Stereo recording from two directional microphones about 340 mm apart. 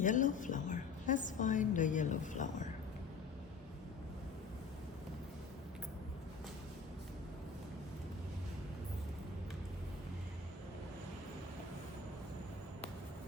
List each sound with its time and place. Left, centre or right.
0.0 s a woman's voice: left